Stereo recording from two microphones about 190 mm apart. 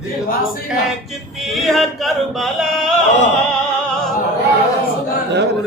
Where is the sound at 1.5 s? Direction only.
Centre (ahead or behind).